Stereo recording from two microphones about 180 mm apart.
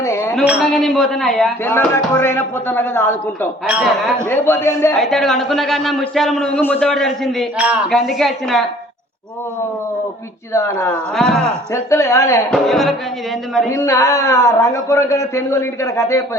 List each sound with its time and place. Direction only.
0.0 s a sound: 15° left (ahead or behind)
0.3 s a man's voice: 5° right (ahead or behind)
1.6 s a man's voice: 10° left (ahead or behind)
3.7 s a man's voice: 5° right (ahead or behind)
4.3 s a man's voice: 10° left (ahead or behind)
4.9 s a man's voice: centre (ahead or behind)
11.1 s a man's voice: 5° left (ahead or behind)
11.7 s a man's voice: 15° left (ahead or behind)
12.5 s a man's voice: centre (ahead or behind)
13.7 s a man's voice: 15° left (ahead or behind)